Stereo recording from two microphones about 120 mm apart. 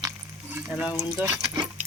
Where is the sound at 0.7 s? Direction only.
10° right (ahead or behind).